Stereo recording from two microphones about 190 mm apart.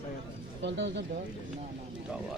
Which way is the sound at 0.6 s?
65° right (ahead or behind).